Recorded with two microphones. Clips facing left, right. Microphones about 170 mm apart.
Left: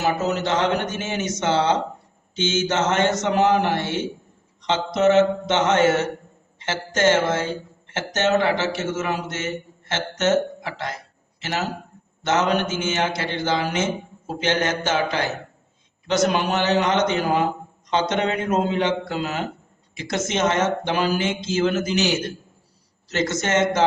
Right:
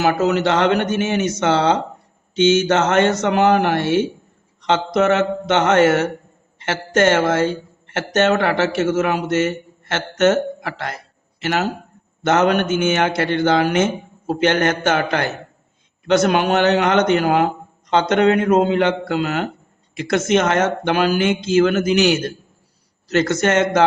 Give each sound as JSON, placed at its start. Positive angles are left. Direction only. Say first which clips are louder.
{"t": 0.0, "sound": "a man's voice", "louder": "right 6 dB", "side_deg": -75}